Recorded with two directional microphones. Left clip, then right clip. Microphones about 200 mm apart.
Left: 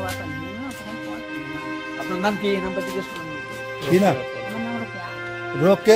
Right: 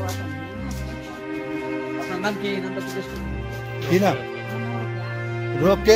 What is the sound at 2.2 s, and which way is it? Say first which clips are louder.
Speech: left 5 dB; 50° left (ahead or behind).